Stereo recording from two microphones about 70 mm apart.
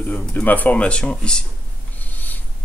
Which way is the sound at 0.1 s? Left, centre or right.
Left.